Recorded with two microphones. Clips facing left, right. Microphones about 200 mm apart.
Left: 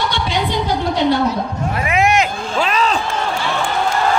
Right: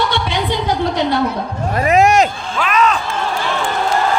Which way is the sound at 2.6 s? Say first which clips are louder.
Right 2 dB; 30° left (ahead or behind).